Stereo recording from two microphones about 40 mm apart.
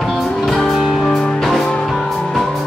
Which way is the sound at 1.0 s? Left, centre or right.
Centre.